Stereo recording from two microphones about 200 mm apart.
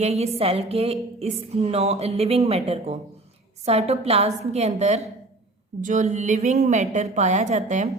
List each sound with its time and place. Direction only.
0.0 s a woman's voice: 35° right (ahead or behind)